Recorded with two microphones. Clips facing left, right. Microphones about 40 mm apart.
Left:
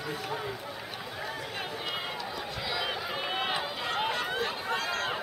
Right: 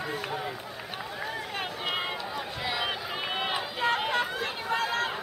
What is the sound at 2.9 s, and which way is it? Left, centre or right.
Run, centre.